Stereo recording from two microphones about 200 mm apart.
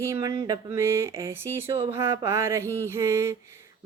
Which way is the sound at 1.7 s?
30° right (ahead or behind).